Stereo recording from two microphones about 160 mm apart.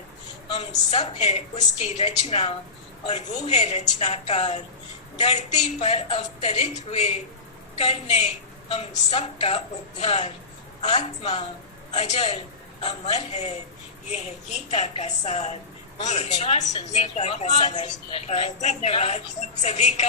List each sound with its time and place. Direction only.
0.9 s a woman's voice: 45° left (ahead or behind)